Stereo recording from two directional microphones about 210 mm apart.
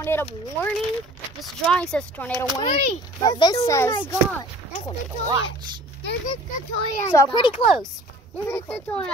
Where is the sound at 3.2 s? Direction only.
20° left (ahead or behind).